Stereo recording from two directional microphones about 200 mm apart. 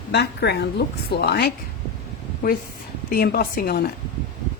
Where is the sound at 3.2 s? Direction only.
50° left (ahead or behind).